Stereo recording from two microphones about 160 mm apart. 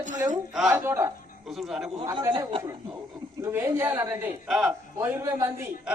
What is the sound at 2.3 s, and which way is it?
Speech, 30° right (ahead or behind).